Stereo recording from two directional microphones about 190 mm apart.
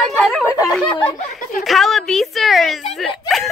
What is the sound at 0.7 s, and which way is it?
Speech, 5° left (ahead or behind).